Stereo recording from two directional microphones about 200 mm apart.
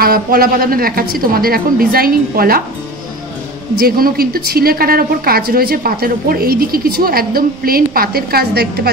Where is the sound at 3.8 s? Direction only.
50° right (ahead or behind).